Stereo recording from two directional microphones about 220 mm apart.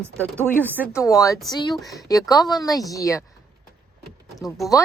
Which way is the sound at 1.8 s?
Centre (ahead or behind).